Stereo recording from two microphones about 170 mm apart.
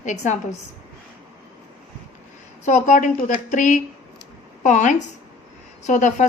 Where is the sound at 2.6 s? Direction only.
45° left (ahead or behind).